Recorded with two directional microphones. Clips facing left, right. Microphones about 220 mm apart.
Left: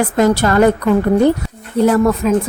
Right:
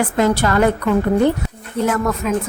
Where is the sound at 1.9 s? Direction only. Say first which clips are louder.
Left 7 dB; 35° left (ahead or behind).